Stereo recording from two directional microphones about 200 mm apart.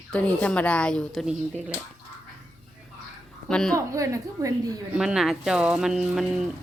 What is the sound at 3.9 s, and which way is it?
Speech, 15° right (ahead or behind).